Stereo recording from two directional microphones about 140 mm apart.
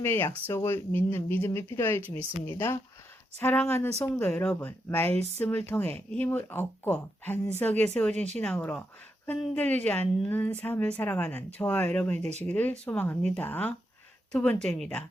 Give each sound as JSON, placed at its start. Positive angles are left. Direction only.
{"t": 0.0, "sound": "a woman's voice", "side_deg": 15}